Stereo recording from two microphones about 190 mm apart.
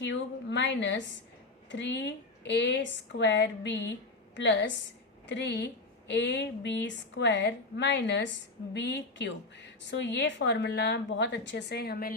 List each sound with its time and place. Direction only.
0.0 s a woman's voice: 70° left (ahead or behind); by 12.1 s 50° left (ahead or behind)